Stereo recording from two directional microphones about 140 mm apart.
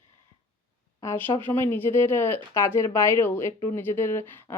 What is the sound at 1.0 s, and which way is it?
Speech, 20° left (ahead or behind).